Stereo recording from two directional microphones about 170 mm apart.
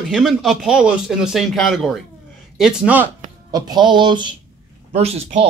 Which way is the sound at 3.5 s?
25° right (ahead or behind).